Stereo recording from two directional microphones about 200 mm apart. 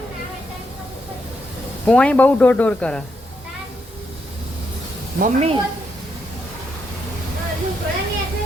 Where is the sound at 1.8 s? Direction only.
5° left (ahead or behind).